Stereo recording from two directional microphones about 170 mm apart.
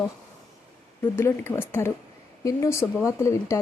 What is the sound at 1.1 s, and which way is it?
Speech, 15° left (ahead or behind).